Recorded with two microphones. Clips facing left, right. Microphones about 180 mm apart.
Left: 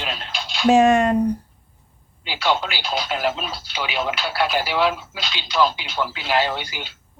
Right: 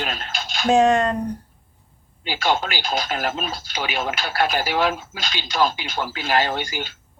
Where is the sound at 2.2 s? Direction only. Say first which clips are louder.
Even; 50° right (ahead or behind).